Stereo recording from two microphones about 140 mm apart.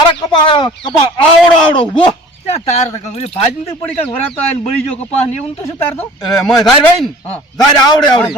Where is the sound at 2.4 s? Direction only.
50° left (ahead or behind).